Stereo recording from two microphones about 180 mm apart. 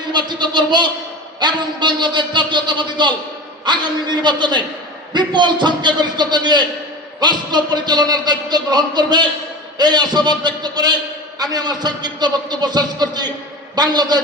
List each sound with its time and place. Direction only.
0.1 s a man's voice: 25° right (ahead or behind)